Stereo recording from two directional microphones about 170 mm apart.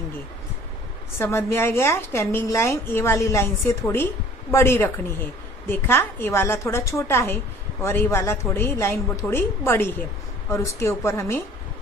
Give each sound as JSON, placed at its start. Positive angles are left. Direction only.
{"t": 1.1, "sound": "a woman's voice", "side_deg": 15}